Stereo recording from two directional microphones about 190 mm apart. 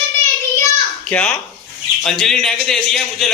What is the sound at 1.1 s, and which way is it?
A child's voice, 5° left (ahead or behind).